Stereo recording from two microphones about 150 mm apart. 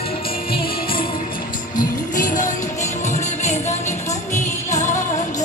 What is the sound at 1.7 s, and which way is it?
Music, 60° left (ahead or behind).